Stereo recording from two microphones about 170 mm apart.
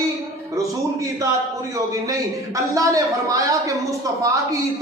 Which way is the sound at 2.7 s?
20° right (ahead or behind).